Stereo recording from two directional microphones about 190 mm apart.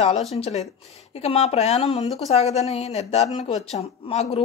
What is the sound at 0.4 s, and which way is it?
Speech, 35° left (ahead or behind).